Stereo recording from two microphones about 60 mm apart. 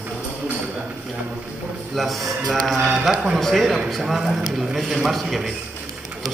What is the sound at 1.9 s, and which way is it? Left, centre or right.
A man's voice, centre.